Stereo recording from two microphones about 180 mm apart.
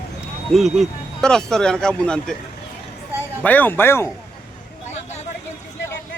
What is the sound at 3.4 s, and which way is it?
Speech, 10° left (ahead or behind).